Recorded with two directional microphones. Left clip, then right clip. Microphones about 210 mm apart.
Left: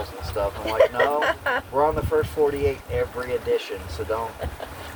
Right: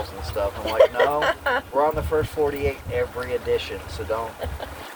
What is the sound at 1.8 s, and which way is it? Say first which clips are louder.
Speech: left 2 dB; 15° left (ahead or behind).